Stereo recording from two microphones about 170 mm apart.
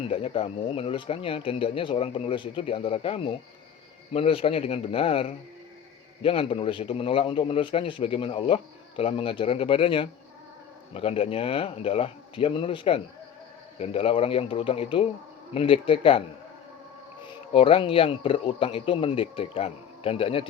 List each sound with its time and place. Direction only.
0.1 s a man's voice: 35° left (ahead or behind)
17.5 s a man's voice: 35° left (ahead or behind)